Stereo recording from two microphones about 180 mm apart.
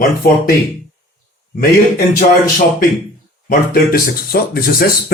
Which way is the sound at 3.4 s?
55° left (ahead or behind).